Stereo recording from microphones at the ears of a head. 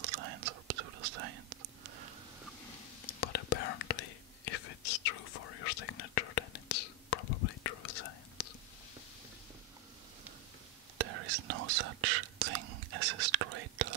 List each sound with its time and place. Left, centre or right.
0.0 s whispering: right
3.1 s whispering: left
11.0 s whispering: right